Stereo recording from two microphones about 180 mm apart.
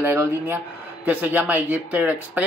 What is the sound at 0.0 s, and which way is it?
Speech, 15° right (ahead or behind).